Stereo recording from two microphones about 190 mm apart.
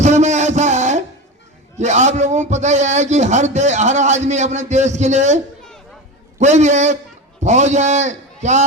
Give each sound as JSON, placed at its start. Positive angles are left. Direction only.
{"t": 0.0, "sound": "a sound", "side_deg": -35}
{"t": 1.8, "sound": "a man's voice", "side_deg": -35}
{"t": 6.4, "sound": "a man's voice", "side_deg": -35}